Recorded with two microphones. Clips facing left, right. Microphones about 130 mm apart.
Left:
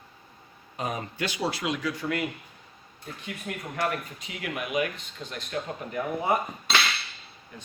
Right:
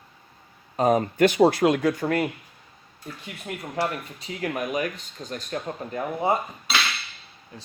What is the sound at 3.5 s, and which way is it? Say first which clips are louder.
Speech: right 2 dB; 30° right (ahead or behind).